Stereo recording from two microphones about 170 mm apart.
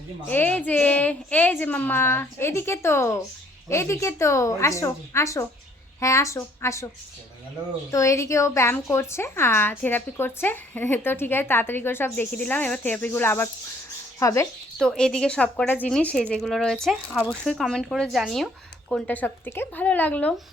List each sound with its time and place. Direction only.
0.3 s a woman's voice: 10° left (ahead or behind)
7.9 s a woman's voice: 20° left (ahead or behind)
14.8 s a woman's voice: 5° left (ahead or behind)